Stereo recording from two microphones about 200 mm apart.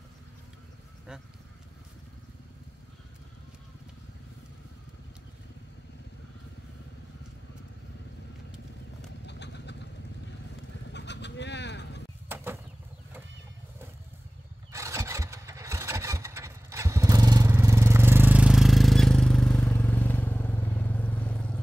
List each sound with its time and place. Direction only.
9.2 s vehicle: 60° left (ahead or behind)
10.9 s a sound: 60° left (ahead or behind)
14.7 s vehicle: 15° right (ahead or behind); by 21.5 s 5° left (ahead or behind)